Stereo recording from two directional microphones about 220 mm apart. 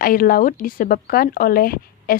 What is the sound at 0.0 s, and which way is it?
Speech, 40° left (ahead or behind).